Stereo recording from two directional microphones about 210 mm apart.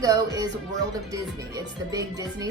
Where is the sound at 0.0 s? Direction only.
15° right (ahead or behind).